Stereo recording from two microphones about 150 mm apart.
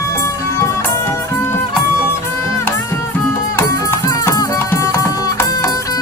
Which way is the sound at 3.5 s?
20° left (ahead or behind).